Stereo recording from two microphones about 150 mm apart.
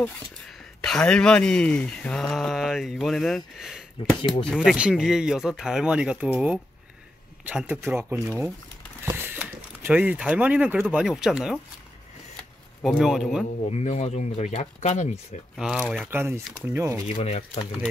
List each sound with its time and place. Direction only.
0.7 s speech: 5° left (ahead or behind)
13.0 s speech: centre (ahead or behind)
13.7 s speech: 45° left (ahead or behind)
15.5 s speech: 5° right (ahead or behind)
16.1 s speech: 15° right (ahead or behind)
17.1 s speech: 45° left (ahead or behind)